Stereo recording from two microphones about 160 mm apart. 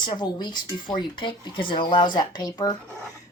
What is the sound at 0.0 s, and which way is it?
Speech, 25° left (ahead or behind).